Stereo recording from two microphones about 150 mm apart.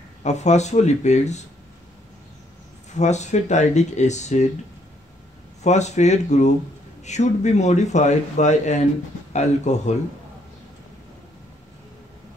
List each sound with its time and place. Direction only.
0.2 s speech: 50° left (ahead or behind)
3.0 s speech: 50° left (ahead or behind)
5.6 s speech: 50° left (ahead or behind)